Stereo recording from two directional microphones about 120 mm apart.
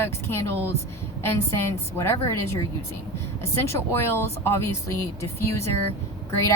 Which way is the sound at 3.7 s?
20° left (ahead or behind).